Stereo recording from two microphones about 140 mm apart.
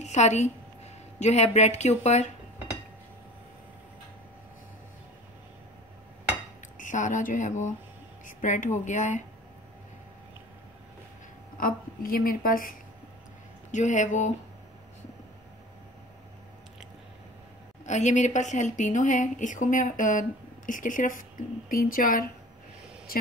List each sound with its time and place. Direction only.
0.0 s a woman's voice: 55° left (ahead or behind)
6.8 s a woman's voice: 65° left (ahead or behind)
11.5 s a woman's voice: 90° left
13.7 s a woman's voice: 60° left (ahead or behind)
17.8 s a woman's voice: 60° left (ahead or behind); by 22.2 s 85° left